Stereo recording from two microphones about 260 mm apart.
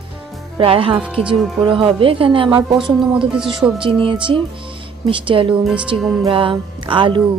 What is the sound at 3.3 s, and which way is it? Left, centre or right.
Speech, centre.